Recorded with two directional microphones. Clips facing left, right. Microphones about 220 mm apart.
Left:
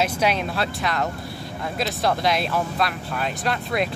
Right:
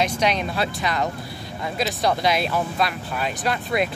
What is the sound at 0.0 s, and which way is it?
Speech, 5° left (ahead or behind).